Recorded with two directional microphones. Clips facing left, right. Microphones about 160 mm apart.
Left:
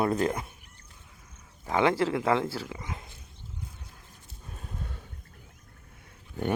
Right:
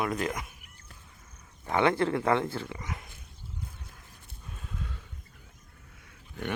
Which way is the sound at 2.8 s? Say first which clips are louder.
Even; 20° left (ahead or behind).